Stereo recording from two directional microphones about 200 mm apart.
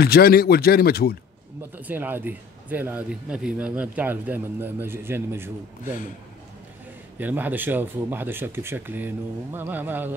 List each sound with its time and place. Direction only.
0.0 s speech: 50° left (ahead or behind)
1.6 s speech: 10° right (ahead or behind)
7.2 s speech: 10° right (ahead or behind)